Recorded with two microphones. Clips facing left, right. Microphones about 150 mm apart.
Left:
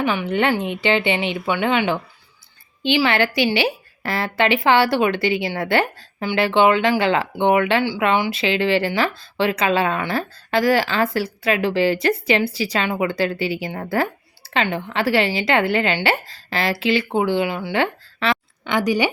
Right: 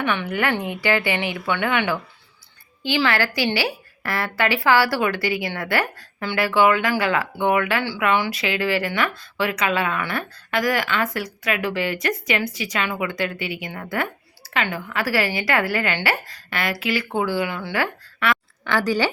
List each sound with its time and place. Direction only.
0.3 s speech: 25° left (ahead or behind)